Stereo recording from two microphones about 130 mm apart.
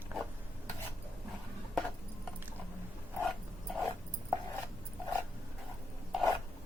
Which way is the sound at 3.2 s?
Centre (ahead or behind).